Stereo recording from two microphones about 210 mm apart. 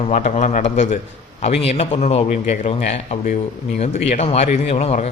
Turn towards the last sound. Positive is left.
turn(degrees=30)  # may be behind; listen again after turning